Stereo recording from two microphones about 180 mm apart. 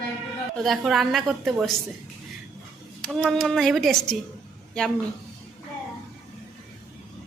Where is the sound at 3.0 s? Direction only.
Centre (ahead or behind).